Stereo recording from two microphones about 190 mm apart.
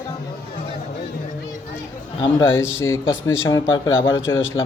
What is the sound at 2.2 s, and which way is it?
Speech, 15° left (ahead or behind).